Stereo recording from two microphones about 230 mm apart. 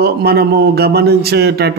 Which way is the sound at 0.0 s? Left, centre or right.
Right.